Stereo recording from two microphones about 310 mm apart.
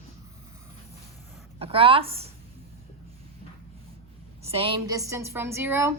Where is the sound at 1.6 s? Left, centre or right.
Centre.